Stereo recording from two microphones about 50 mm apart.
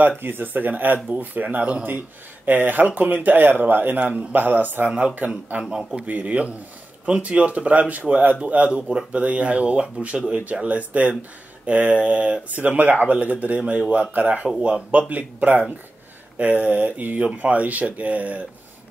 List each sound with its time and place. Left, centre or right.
0.2 s speech: right
4.0 s speech: right
4.4 s speech: right
4.8 s speech: right
6.0 s speech: right